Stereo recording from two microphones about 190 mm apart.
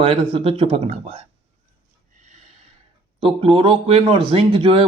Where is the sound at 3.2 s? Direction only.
30° right (ahead or behind).